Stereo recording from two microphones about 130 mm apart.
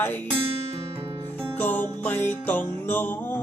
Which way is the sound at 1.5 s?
15° left (ahead or behind).